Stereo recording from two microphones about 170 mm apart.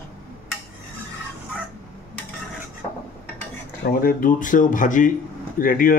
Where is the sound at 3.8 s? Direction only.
55° left (ahead or behind).